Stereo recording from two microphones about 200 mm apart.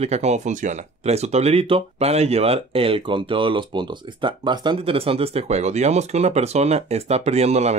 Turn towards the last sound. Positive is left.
turn(degrees=-35)  # may be behind; listen again after turning